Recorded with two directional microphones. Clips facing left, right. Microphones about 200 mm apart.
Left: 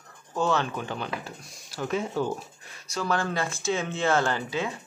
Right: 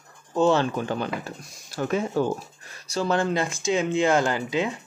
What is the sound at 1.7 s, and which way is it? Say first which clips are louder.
Speech: right 3 dB; 50° right (ahead or behind).